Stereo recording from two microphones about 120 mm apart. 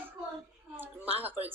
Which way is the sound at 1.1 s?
15° right (ahead or behind).